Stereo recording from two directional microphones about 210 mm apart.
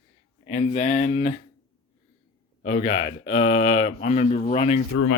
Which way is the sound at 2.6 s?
40° left (ahead or behind).